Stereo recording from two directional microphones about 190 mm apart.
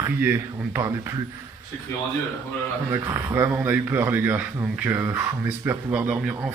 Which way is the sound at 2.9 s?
15° right (ahead or behind).